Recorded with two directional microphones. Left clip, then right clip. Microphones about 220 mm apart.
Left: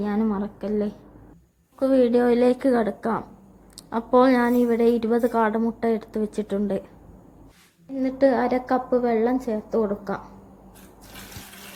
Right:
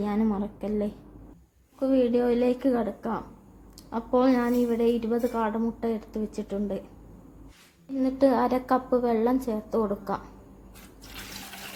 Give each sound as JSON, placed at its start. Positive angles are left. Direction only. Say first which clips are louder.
{"t": 0.0, "sound": "a woman's voice", "louder": "left 2 dB", "side_deg": 15}
{"t": 7.9, "sound": "a woman's voice", "louder": "left 3 dB", "side_deg": 15}